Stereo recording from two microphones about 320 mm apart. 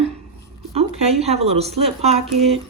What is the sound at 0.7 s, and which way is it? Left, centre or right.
Speech, centre.